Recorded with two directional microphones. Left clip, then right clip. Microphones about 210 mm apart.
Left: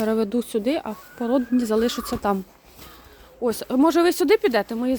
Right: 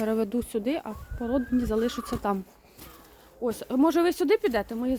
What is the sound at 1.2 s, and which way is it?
Speech, 30° left (ahead or behind).